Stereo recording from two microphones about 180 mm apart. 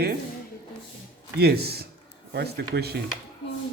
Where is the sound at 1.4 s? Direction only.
65° right (ahead or behind).